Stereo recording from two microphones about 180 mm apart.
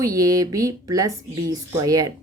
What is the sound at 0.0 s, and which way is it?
A woman's voice, 20° right (ahead or behind).